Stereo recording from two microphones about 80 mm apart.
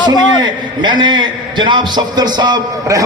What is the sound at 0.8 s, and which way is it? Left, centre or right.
A man's voice, right.